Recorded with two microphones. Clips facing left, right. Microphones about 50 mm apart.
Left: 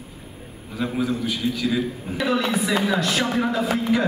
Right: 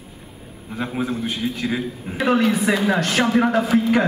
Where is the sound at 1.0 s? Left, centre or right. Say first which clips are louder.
Even; right.